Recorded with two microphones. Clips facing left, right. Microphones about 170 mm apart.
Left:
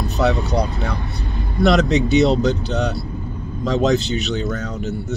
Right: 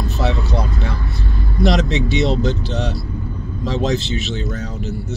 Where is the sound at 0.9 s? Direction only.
20° left (ahead or behind).